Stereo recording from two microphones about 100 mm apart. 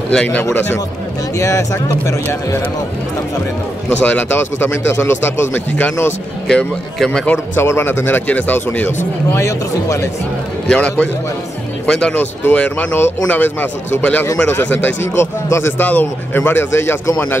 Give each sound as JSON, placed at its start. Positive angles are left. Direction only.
{"t": 0.1, "sound": "speech", "side_deg": 15}
{"t": 1.4, "sound": "speech", "side_deg": 35}
{"t": 4.0, "sound": "a man's voice", "side_deg": 15}
{"t": 7.6, "sound": "a man's voice", "side_deg": 25}
{"t": 10.7, "sound": "a man's voice", "side_deg": 10}